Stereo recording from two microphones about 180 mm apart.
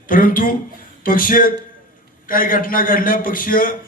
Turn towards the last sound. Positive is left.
turn(degrees=50)  # may be behind; listen again after turning